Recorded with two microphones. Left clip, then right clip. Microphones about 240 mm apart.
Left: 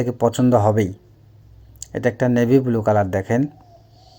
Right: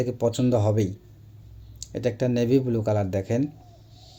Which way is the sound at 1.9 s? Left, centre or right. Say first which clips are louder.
Left 6 dB; centre.